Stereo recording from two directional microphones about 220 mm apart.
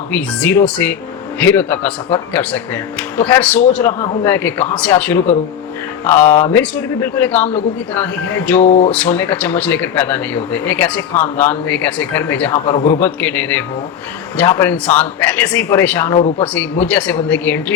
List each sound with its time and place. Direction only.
0.1 s speech: 5° left (ahead or behind)
8.6 s a sound: 30° left (ahead or behind)
8.9 s speech: 5° left (ahead or behind)